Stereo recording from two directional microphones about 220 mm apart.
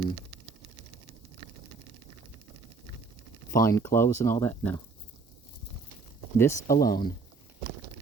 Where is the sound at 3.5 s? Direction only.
15° left (ahead or behind).